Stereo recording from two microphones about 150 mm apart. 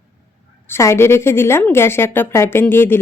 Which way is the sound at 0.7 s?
15° left (ahead or behind).